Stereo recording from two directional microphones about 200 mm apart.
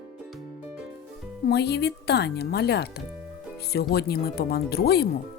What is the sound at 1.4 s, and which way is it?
Speech, 55° left (ahead or behind).